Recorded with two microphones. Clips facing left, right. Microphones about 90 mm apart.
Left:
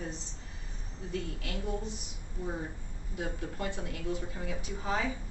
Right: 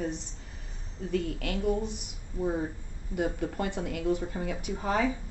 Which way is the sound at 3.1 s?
60° right (ahead or behind).